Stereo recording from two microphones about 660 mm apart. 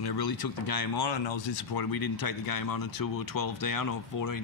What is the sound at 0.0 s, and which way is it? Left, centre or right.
Speech, left.